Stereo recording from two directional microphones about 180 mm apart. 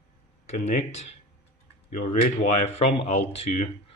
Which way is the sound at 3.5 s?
50° left (ahead or behind).